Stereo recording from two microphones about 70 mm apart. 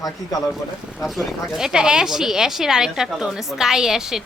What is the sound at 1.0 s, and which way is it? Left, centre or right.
A woman's voice, centre.